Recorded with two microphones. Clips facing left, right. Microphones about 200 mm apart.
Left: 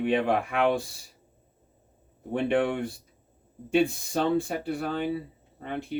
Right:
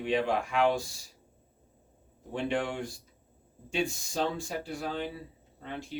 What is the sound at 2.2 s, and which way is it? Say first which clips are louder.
Speech: left 6 dB; 60° left (ahead or behind).